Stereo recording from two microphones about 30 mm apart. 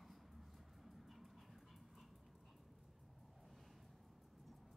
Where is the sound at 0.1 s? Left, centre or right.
Centre.